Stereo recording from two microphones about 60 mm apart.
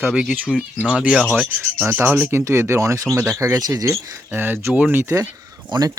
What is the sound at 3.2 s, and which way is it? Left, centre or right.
Speech, right.